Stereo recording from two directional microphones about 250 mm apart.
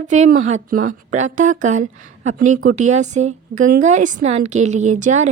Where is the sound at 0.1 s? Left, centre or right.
Right.